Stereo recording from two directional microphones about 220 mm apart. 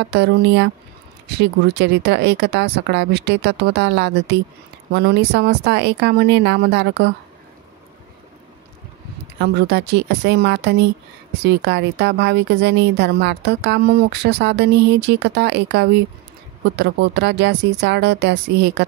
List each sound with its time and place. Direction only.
0.0 s a woman's voice: 50° right (ahead or behind)
9.4 s a woman's voice: 50° right (ahead or behind)